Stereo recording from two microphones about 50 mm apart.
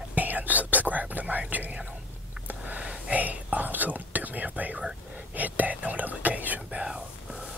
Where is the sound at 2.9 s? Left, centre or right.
Right.